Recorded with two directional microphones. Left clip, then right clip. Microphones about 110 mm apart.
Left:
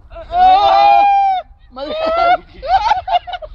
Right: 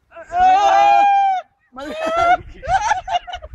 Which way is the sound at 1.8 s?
15° left (ahead or behind).